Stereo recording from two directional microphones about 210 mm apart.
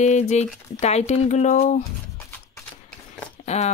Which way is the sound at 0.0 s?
35° left (ahead or behind).